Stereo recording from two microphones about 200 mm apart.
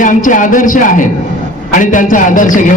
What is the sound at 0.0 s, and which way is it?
A man's voice, 40° left (ahead or behind).